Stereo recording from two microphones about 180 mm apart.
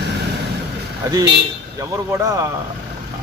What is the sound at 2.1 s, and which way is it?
Speech, 20° right (ahead or behind).